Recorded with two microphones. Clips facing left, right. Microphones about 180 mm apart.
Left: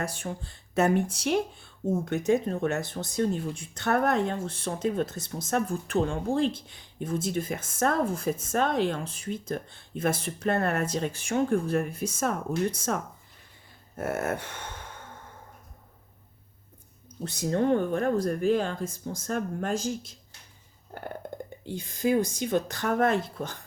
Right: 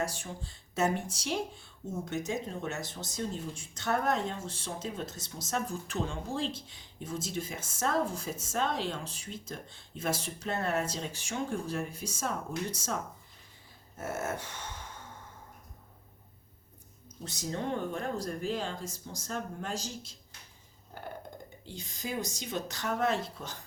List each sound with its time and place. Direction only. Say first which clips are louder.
0.0 s speech: left 2 dB; 55° left (ahead or behind)
17.2 s speech: left 10 dB; 60° left (ahead or behind)
21.6 s speech: left 13 dB; 55° left (ahead or behind)